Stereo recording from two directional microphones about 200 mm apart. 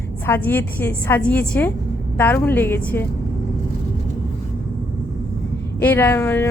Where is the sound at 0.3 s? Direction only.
10° left (ahead or behind).